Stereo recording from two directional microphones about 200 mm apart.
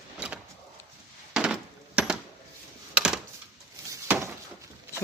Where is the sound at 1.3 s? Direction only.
5° right (ahead or behind).